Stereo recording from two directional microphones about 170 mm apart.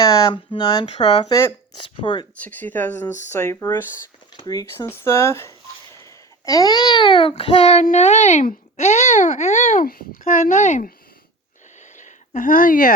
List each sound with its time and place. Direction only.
0.0 s speech: 20° left (ahead or behind)
2.4 s speech: 10° left (ahead or behind); by 10.9 s 45° left (ahead or behind)
11.8 s a sound: 45° left (ahead or behind)